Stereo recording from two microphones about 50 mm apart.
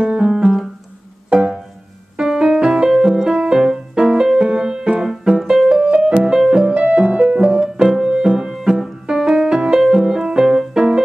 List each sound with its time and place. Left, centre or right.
0.0 s piano: centre
2.1 s music: centre
6.6 s music: right